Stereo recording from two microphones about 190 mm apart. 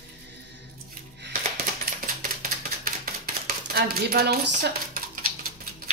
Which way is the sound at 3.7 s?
55° right (ahead or behind).